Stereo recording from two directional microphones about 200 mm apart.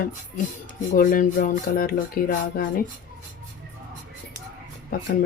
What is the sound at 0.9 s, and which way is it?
Music, 40° left (ahead or behind).